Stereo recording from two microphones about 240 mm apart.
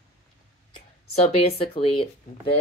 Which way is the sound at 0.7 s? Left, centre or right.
Left.